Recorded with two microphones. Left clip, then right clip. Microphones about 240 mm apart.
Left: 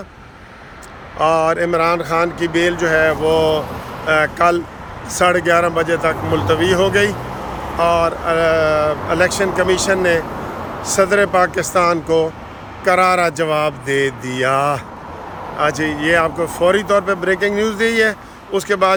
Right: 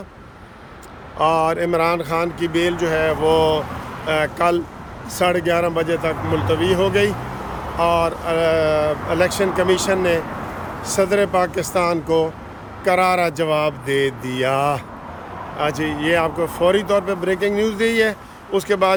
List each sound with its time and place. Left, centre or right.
1.2 s speech: centre